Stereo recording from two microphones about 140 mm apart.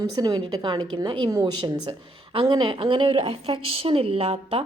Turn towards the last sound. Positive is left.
turn(degrees=-45)  # may be behind; listen again after turning